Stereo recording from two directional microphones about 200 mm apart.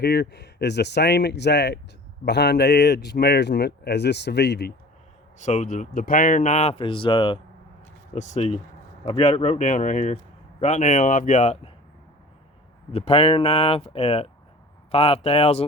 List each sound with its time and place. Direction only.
0.0 s a man's voice: 55° left (ahead or behind)
5.4 s speech: 35° left (ahead or behind)
8.1 s speech: 35° left (ahead or behind)
12.9 s speech: 30° left (ahead or behind)